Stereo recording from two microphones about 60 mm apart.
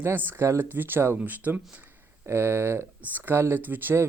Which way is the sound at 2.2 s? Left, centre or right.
Right.